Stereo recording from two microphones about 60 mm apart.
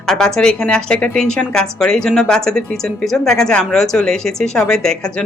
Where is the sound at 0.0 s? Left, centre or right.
Centre.